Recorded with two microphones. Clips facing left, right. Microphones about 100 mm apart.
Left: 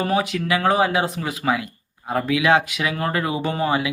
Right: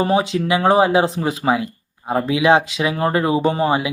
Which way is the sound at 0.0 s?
25° right (ahead or behind).